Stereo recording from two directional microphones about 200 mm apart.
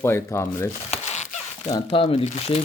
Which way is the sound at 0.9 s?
35° left (ahead or behind).